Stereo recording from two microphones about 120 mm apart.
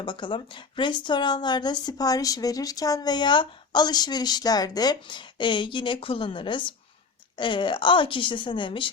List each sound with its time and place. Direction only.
0.0 s a woman's voice: 45° left (ahead or behind)